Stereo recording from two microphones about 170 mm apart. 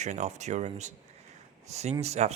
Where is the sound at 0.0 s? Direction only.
45° right (ahead or behind).